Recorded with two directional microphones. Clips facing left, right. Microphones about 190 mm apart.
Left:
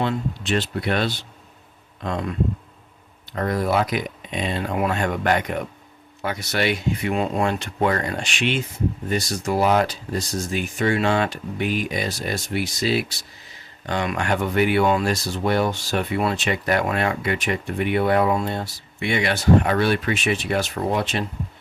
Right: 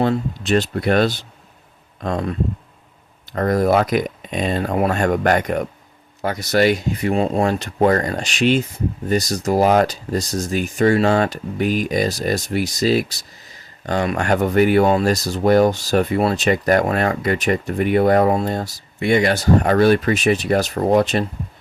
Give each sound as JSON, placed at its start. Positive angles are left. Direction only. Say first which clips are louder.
{"t": 0.0, "sound": "speech", "louder": "right 5 dB", "side_deg": -45}
{"t": 3.3, "sound": "speech", "louder": "right 5 dB", "side_deg": -45}